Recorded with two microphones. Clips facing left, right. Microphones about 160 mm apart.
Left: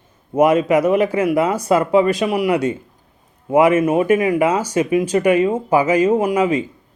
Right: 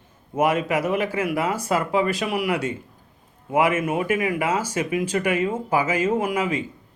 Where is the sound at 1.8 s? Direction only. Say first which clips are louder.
Left 7 dB; 30° left (ahead or behind).